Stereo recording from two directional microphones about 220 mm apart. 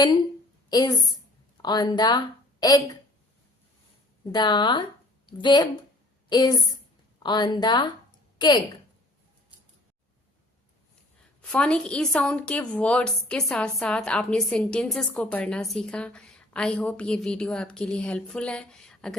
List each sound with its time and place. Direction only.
0.7 s a woman's voice: 20° left (ahead or behind)
4.3 s a woman's voice: 20° left (ahead or behind)
11.4 s a woman's voice: 5° left (ahead or behind)